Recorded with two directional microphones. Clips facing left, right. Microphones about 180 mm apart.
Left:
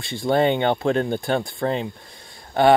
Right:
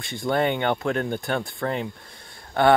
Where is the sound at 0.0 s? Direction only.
25° left (ahead or behind).